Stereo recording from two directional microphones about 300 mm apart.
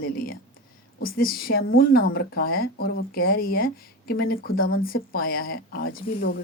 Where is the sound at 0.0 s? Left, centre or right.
Left.